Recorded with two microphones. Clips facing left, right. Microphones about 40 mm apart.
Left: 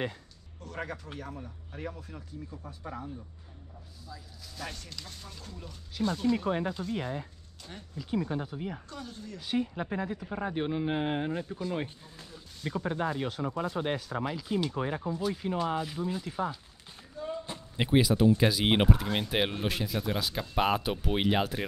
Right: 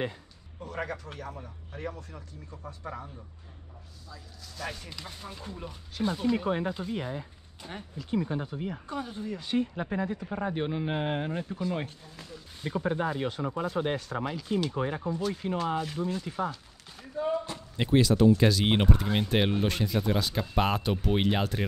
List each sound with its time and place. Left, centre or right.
0.6 s speech: centre
2.6 s speech: centre
4.6 s speech: centre
5.9 s speech: centre
7.6 s speech: right
8.0 s speech: centre
8.8 s speech: right
9.4 s speech: centre
17.7 s speech: centre